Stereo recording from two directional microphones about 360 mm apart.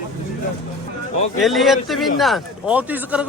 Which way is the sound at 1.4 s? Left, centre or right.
Centre.